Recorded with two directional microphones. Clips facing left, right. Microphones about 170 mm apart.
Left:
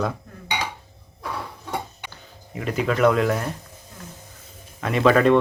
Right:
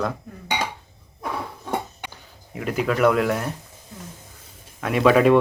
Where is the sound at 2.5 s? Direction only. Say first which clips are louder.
Even; 5° right (ahead or behind).